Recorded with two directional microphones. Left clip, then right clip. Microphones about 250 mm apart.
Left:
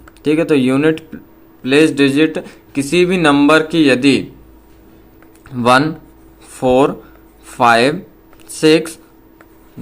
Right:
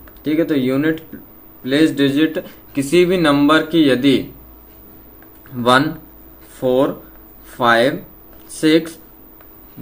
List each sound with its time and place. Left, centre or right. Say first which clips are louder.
0.3 s speech: left 4 dB; left
5.5 s speech: left 2 dB; left